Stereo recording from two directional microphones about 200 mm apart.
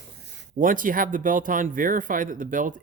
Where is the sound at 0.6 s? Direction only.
40° right (ahead or behind).